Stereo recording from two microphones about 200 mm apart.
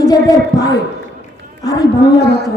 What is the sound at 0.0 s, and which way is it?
Speech, 20° left (ahead or behind).